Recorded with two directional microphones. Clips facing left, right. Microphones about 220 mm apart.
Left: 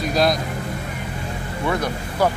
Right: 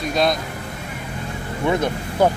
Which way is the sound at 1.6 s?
20° right (ahead or behind).